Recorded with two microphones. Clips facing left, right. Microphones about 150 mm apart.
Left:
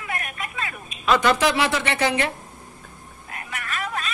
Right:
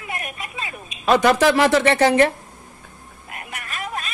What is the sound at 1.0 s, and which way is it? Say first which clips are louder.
A woman's voice: right 4 dB; 45° right (ahead or behind).